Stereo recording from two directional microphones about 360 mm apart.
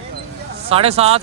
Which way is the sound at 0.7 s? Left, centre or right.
Centre.